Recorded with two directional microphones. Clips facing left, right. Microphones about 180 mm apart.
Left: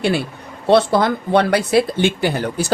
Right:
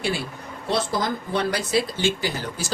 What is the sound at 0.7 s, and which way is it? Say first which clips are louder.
A woman's voice: left 10 dB; 65° left (ahead or behind).